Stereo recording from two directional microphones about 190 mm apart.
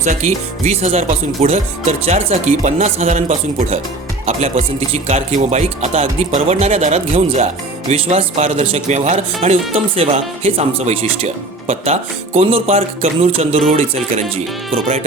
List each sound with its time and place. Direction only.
0.0 s speech: 40° right (ahead or behind)